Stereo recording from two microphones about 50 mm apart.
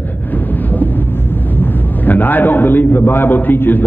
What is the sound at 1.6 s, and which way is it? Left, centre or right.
A man's voice, left.